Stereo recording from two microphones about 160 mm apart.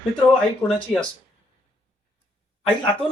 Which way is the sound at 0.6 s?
15° left (ahead or behind).